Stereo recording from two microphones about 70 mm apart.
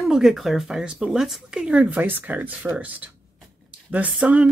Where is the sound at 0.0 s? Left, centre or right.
Centre; by 3.1 s right.